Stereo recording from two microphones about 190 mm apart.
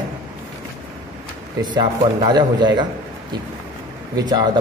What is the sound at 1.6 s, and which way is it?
A man's voice, 20° right (ahead or behind).